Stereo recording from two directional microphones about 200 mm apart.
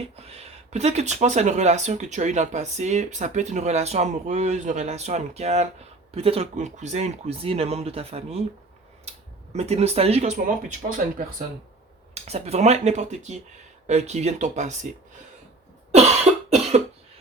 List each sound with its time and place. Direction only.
0.0 s speech: 30° right (ahead or behind)
12.1 s speech: 30° right (ahead or behind)
16.0 s cough: 35° right (ahead or behind)